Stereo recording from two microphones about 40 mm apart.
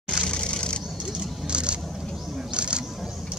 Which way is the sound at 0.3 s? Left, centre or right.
Left.